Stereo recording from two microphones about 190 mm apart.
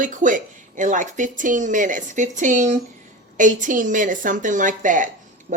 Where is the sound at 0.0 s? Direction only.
40° right (ahead or behind).